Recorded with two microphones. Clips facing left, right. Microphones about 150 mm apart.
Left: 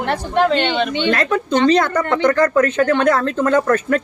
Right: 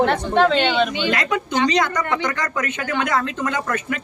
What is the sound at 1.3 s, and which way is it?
Speech, 55° left (ahead or behind).